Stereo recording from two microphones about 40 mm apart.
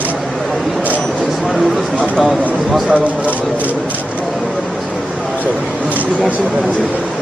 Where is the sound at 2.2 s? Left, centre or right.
Centre.